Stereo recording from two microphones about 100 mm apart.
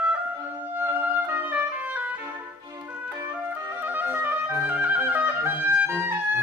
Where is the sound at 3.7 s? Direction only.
20° right (ahead or behind).